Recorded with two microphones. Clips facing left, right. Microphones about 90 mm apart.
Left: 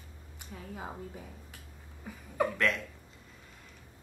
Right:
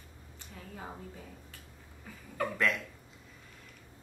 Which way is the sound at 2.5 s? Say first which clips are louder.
Left 1 dB; 5° right (ahead or behind).